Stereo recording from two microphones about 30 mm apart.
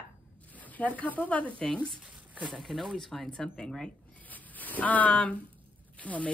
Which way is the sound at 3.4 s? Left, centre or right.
Centre.